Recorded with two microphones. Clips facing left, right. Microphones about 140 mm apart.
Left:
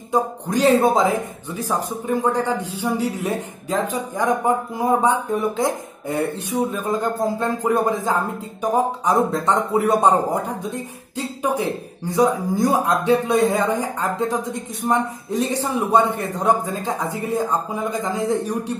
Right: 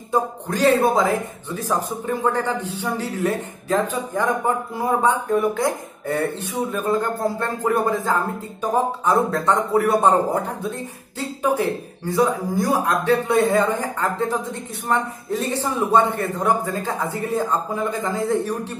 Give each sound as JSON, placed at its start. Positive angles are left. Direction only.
{"t": 0.1, "sound": "speech", "side_deg": 20}
{"t": 1.5, "sound": "a man's voice", "side_deg": 10}
{"t": 6.7, "sound": "a man's voice", "side_deg": 15}